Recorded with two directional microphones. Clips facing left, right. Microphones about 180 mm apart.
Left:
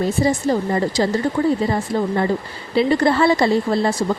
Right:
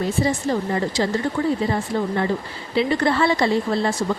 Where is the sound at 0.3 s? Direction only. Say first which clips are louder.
Left 3 dB; 40° left (ahead or behind).